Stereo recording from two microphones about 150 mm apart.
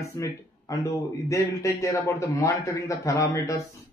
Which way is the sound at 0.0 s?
20° left (ahead or behind).